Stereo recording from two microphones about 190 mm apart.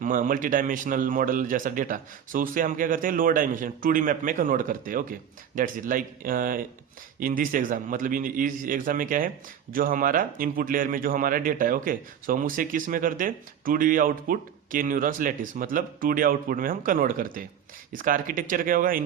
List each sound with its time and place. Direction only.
0.0 s speech: 45° right (ahead or behind)